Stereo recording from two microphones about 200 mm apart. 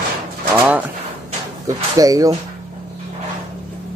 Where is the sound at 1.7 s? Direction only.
15° right (ahead or behind).